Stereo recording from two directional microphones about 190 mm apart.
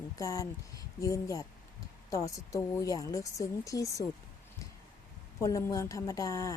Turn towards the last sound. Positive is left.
turn(degrees=15)  # may be behind; listen again after turning